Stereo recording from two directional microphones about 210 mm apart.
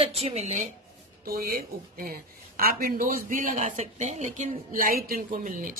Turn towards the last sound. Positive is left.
turn(degrees=-40)  # may be behind; listen again after turning